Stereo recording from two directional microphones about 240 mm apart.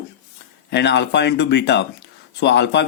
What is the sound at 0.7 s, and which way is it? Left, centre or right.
Speech, left.